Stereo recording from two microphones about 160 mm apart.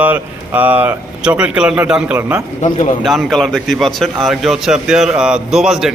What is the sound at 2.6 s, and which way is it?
Speech, 50° left (ahead or behind).